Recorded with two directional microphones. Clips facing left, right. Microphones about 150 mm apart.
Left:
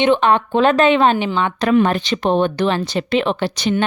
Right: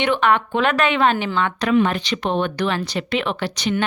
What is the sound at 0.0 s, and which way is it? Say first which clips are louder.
Speech: left 4 dB; 20° left (ahead or behind).